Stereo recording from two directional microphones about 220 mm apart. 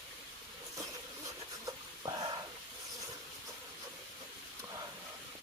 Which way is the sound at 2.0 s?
15° right (ahead or behind).